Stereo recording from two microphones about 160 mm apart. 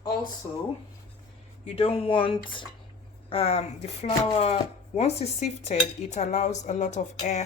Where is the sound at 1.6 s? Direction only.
35° left (ahead or behind).